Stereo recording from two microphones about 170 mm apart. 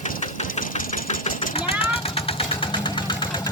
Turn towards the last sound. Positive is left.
turn(degrees=25)  # may be behind; listen again after turning